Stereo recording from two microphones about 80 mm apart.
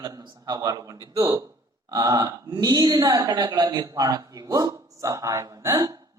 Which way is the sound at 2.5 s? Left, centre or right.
Right.